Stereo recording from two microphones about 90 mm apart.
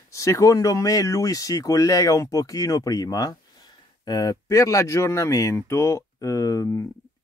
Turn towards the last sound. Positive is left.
turn(degrees=40)  # may be behind; listen again after turning